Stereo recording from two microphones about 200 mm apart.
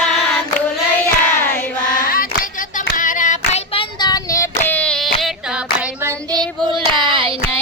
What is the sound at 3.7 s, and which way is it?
Child singing, 20° left (ahead or behind).